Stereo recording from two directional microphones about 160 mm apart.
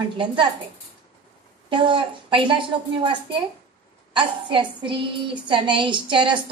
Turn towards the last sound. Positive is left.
turn(degrees=-30)  # may be behind; listen again after turning